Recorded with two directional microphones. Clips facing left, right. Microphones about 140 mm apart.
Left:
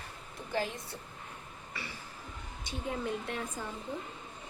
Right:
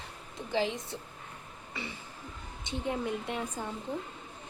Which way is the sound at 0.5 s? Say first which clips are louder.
Right 4 dB; 20° right (ahead or behind).